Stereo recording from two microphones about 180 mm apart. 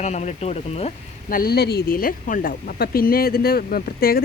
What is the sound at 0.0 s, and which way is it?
Speech, 40° left (ahead or behind).